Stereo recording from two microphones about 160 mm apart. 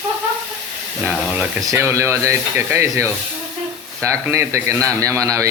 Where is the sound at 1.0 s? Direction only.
10° right (ahead or behind).